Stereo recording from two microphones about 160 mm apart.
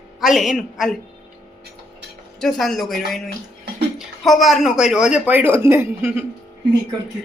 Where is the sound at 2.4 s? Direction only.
Centre (ahead or behind).